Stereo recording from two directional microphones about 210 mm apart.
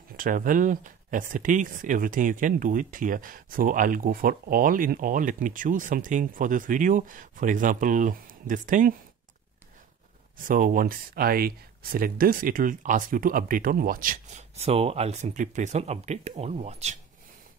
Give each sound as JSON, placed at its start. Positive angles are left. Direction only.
{"t": 0.1, "sound": "speech", "side_deg": -40}
{"t": 10.3, "sound": "speech", "side_deg": -40}